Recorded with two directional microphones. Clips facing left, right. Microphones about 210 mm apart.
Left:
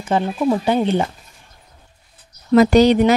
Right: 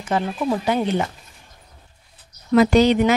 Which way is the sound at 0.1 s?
25° left (ahead or behind).